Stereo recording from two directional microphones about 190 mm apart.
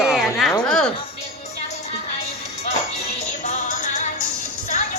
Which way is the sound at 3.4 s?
35° left (ahead or behind).